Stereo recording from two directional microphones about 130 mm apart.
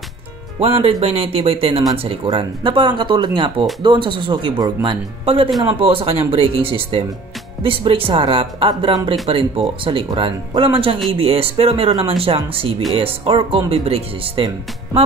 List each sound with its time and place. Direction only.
0.6 s speech: 50° right (ahead or behind)